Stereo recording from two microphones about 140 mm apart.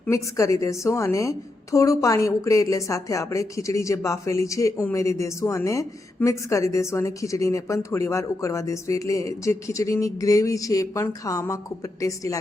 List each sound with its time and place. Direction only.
0.1 s a woman's voice: 25° left (ahead or behind)